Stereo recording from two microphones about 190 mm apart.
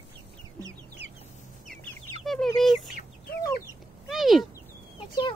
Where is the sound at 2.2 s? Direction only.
Centre (ahead or behind).